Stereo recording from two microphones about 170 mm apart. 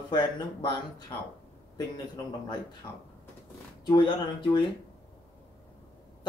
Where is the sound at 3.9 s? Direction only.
30° left (ahead or behind).